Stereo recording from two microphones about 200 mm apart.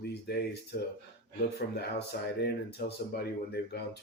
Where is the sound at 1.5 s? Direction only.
55° left (ahead or behind).